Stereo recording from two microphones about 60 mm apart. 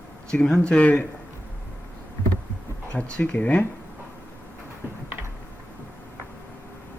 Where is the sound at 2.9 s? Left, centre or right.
Left.